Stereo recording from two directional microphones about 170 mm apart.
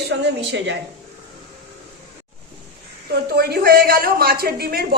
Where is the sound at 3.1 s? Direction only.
65° right (ahead or behind).